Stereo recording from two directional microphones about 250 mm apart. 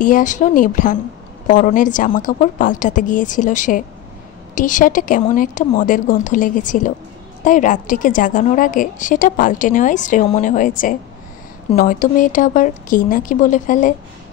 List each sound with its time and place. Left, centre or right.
0.0 s a woman's voice: left
11.7 s a woman's voice: left